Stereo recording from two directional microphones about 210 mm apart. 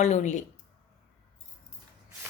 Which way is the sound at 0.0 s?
35° left (ahead or behind).